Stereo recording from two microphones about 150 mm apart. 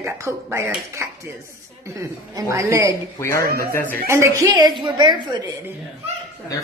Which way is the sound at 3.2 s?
20° left (ahead or behind).